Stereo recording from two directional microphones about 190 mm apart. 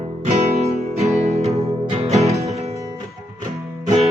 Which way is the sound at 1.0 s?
35° right (ahead or behind).